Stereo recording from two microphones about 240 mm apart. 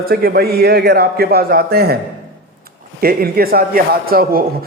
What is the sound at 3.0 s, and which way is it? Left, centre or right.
A man's voice, right.